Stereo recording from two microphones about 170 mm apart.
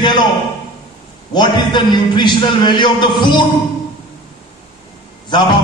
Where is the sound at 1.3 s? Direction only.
25° left (ahead or behind).